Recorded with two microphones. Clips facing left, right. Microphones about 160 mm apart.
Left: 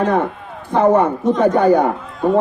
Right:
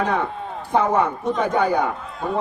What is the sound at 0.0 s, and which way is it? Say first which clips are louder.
A man's voice: left 5 dB; 50° left (ahead or behind).